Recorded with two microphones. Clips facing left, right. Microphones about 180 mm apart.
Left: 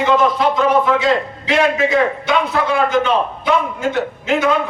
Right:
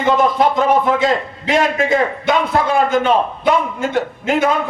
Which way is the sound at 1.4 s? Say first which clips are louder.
Even; 50° right (ahead or behind).